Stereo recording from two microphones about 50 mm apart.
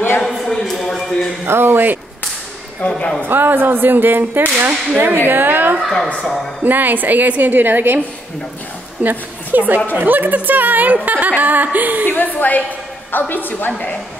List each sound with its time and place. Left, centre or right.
0.2 s a sound: centre
1.4 s speech: right
3.0 s speech: left
3.3 s speech: right
4.6 s a woman's voice: right
5.0 s speech: right
5.8 s a woman's voice: centre
6.6 s a woman's voice: right
9.0 s a woman's voice: right
12.1 s a woman's voice: left